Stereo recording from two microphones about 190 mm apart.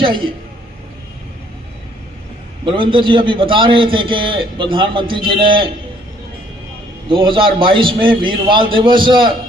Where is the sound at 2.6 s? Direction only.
25° right (ahead or behind).